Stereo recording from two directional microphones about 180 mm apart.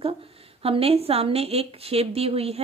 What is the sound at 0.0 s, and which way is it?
A woman's voice, 30° right (ahead or behind).